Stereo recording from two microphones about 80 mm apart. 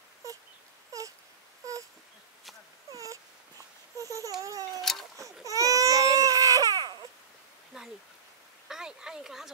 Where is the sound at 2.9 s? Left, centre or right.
Right.